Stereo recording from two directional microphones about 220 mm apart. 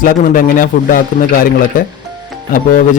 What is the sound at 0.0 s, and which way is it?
A man's voice, 40° left (ahead or behind).